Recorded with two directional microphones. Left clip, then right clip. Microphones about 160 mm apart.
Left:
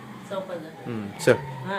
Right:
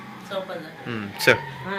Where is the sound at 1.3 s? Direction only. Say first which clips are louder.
Right 2 dB; 30° left (ahead or behind).